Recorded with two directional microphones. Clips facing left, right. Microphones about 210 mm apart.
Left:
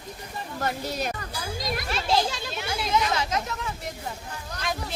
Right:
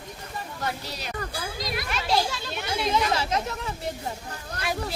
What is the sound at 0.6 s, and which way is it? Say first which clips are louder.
Speech: left 6 dB; 50° left (ahead or behind).